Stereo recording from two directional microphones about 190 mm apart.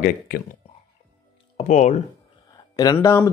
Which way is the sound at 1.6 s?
35° left (ahead or behind).